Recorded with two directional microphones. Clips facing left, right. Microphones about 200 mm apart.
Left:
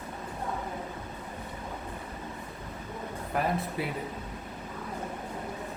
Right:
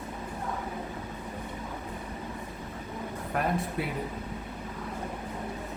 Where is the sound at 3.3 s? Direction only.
Centre (ahead or behind).